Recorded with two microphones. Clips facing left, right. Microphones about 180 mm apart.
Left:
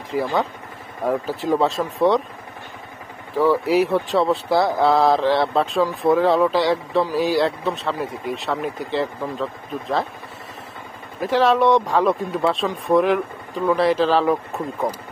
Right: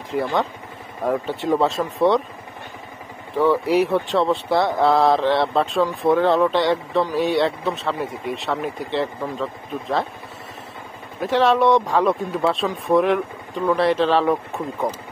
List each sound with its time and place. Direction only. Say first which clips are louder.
0.1 s speech: even; centre (ahead or behind)
3.3 s speech: even; centre (ahead or behind)
11.1 s speech: even; centre (ahead or behind)